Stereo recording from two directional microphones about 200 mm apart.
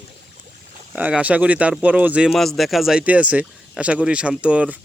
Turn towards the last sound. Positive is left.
turn(degrees=-5)  # may be behind; listen again after turning